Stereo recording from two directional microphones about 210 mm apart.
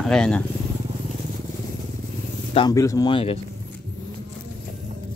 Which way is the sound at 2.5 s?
15° left (ahead or behind).